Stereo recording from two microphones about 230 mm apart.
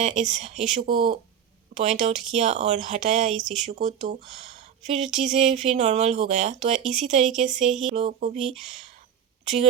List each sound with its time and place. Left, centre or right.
0.0 s speech: right
0.9 s a sound: right
1.7 s speech: right
3.3 s speech: centre
3.7 s speech: right
7.9 s a sound: right
9.4 s speech: right